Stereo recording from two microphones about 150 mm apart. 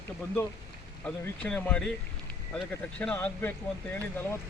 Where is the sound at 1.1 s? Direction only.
10° left (ahead or behind).